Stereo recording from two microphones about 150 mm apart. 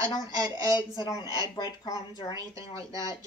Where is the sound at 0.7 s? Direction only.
25° left (ahead or behind).